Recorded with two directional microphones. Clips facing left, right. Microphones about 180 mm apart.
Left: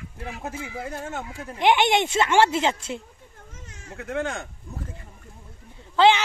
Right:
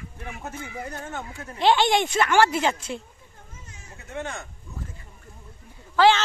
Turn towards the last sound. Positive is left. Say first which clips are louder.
# left 1 dB
turn(degrees=20)  # may be behind; listen again after turning